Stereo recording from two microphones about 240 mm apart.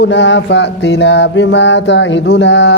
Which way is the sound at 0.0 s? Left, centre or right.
Left.